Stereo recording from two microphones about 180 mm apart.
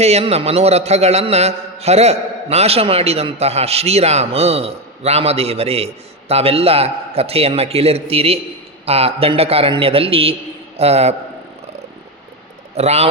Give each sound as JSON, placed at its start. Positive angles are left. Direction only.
{"t": 0.0, "sound": "a man's voice", "side_deg": -35}
{"t": 12.7, "sound": "a man's voice", "side_deg": -35}